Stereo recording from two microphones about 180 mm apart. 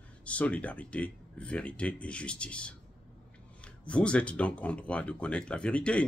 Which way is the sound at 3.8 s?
5° left (ahead or behind).